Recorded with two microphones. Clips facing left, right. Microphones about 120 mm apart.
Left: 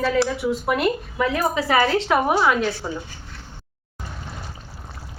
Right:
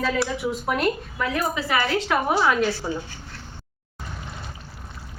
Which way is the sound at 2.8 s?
5° right (ahead or behind).